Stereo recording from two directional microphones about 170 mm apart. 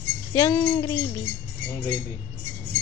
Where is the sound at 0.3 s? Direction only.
20° left (ahead or behind).